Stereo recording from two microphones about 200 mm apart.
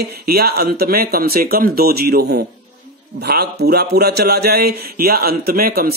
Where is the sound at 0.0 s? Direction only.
50° right (ahead or behind).